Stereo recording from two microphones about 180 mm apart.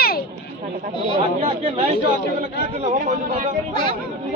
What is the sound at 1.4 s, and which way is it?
Speech, 35° right (ahead or behind).